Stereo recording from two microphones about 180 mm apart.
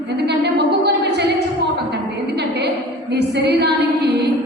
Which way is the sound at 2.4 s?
65° right (ahead or behind).